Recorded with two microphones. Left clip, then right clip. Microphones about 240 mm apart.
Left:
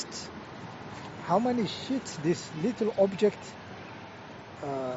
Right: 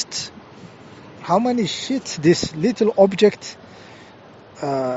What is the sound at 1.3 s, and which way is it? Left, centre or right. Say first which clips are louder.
Speech: right 8 dB; right.